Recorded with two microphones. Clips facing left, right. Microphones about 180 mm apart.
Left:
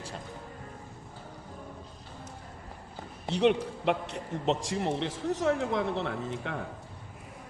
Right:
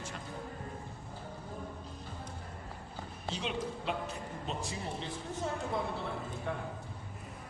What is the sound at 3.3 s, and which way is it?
A man's voice, 70° left (ahead or behind).